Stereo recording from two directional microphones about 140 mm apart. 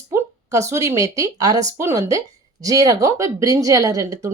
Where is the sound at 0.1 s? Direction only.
20° right (ahead or behind).